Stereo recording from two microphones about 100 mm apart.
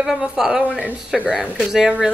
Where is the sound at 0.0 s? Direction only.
5° right (ahead or behind).